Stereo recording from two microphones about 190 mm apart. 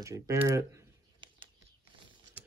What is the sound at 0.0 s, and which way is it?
Speech, 15° right (ahead or behind).